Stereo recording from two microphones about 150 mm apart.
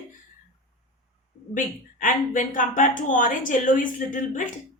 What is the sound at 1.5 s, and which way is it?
A woman's voice, 60° left (ahead or behind).